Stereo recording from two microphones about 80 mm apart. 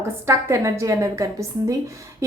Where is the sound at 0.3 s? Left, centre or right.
Right.